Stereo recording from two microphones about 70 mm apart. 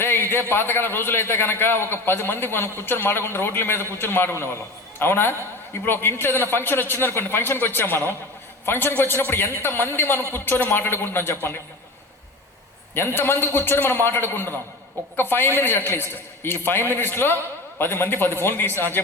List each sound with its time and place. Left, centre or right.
0.0 s a sound: left
0.5 s a man's voice: left
12.9 s a man's voice: left